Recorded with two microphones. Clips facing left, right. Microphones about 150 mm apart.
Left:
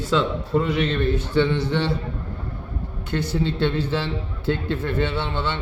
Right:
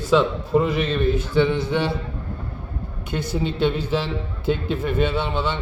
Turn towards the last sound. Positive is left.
turn(degrees=-10)  # may be behind; listen again after turning